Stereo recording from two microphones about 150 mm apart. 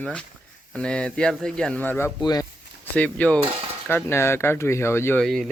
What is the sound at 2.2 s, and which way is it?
Speech, 25° left (ahead or behind).